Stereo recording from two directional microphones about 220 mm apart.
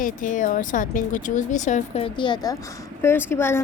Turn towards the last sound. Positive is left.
turn(degrees=10)  # may be behind; listen again after turning